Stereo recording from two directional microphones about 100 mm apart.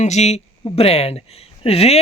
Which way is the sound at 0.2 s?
90° left.